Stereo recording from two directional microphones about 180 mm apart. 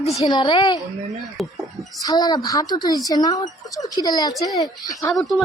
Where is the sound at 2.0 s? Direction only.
20° left (ahead or behind).